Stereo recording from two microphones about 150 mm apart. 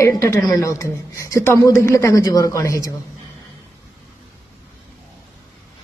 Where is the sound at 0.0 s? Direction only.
20° left (ahead or behind).